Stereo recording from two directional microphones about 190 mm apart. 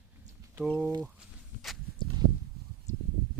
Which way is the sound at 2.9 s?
35° left (ahead or behind).